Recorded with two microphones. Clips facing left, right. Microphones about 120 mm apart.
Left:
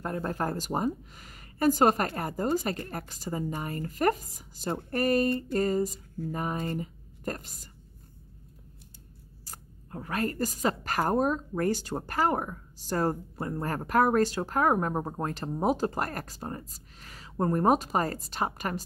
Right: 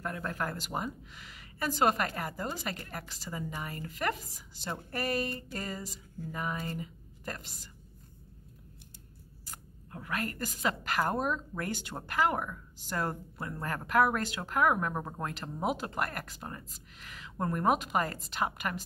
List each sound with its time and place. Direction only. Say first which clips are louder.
0.0 s speech: left 5 dB; 35° left (ahead or behind)
9.5 s speech: left 4 dB; 35° left (ahead or behind)